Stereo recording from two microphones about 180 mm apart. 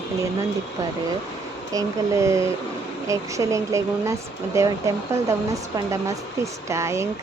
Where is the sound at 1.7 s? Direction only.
15° right (ahead or behind).